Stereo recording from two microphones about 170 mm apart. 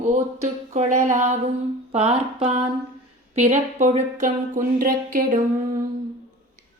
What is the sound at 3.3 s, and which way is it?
A woman's voice, 40° right (ahead or behind).